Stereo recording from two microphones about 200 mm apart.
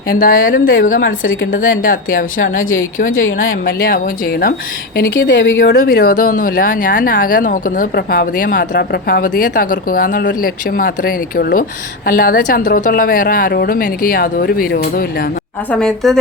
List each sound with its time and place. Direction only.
0.1 s speech: 45° left (ahead or behind)
3.1 s a woman's voice: 85° left
3.3 s speech: 45° left (ahead or behind)
5.0 s speech: 65° left (ahead or behind)
15.7 s speech: 5° left (ahead or behind)